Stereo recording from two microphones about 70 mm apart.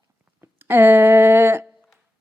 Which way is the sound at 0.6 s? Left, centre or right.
Right.